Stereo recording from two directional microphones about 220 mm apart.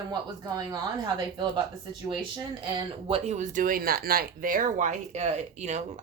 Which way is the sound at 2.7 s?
30° right (ahead or behind).